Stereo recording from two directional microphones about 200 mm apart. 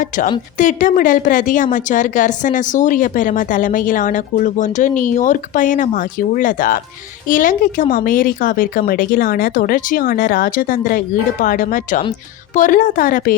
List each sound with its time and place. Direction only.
0.6 s a woman's voice: 40° left (ahead or behind)